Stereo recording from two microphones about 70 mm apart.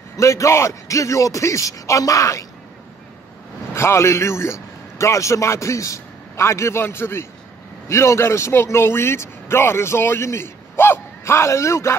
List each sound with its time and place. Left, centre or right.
0.2 s a man's voice: left
3.7 s a man's voice: left